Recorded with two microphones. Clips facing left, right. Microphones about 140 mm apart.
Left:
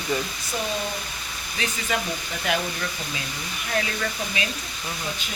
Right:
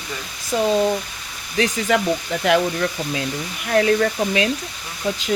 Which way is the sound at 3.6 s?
55° right (ahead or behind).